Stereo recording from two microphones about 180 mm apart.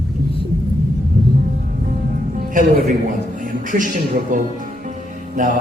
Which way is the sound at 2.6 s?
45° right (ahead or behind).